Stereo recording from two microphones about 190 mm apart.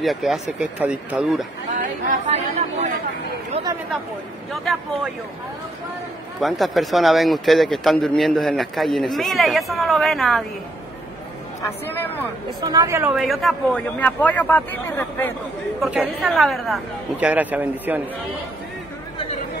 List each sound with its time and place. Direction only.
0.0 s speech: centre (ahead or behind)
1.7 s speech: 40° right (ahead or behind)
4.5 s speech: centre (ahead or behind)
6.4 s speech: centre (ahead or behind)
11.8 s a man's voice: 10° left (ahead or behind)
12.7 s a woman's voice: 15° right (ahead or behind)
13.1 s a man's voice: centre (ahead or behind)
15.8 s speech: 5° right (ahead or behind)